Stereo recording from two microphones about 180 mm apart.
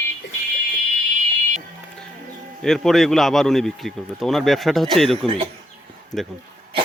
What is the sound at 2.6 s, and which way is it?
Speech, centre (ahead or behind).